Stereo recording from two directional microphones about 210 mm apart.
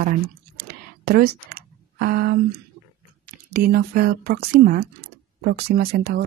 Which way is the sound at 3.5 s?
45° right (ahead or behind).